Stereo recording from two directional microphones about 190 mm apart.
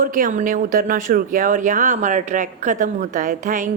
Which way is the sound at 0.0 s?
45° right (ahead or behind).